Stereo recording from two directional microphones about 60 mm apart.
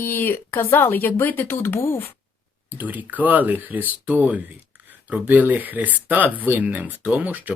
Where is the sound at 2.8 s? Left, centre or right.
Right.